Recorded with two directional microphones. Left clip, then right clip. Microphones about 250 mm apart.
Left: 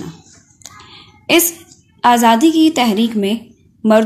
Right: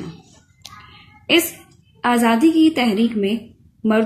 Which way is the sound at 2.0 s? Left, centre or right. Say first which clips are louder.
Left 6 dB; left.